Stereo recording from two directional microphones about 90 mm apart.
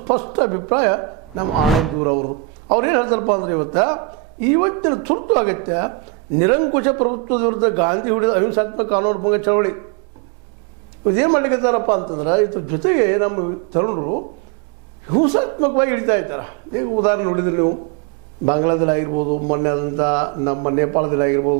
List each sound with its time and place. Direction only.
0.0 s a man's voice: 25° right (ahead or behind)
2.7 s a man's voice: 20° right (ahead or behind)
11.1 s a man's voice: 25° right (ahead or behind)